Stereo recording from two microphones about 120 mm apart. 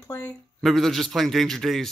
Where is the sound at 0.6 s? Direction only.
Centre (ahead or behind).